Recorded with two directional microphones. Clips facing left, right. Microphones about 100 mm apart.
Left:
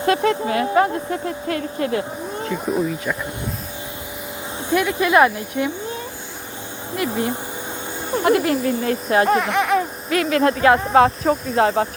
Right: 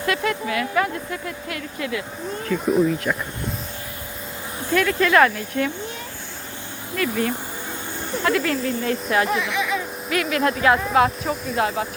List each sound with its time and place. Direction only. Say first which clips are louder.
0.0 s speech: left 5 dB; 30° left (ahead or behind)
2.6 s speech: right 4 dB; centre (ahead or behind)
4.7 s speech: left 1 dB; 15° left (ahead or behind)
6.9 s speech: left 1 dB; 25° left (ahead or behind)
8.8 s speech: left 3 dB; 40° left (ahead or behind)
10.1 s speech: left 3 dB; 35° left (ahead or behind)